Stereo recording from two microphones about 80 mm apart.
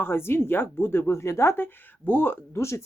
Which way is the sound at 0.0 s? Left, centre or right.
Left.